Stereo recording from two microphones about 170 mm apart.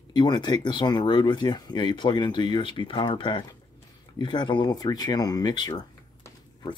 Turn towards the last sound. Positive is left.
turn(degrees=20)  # may be behind; listen again after turning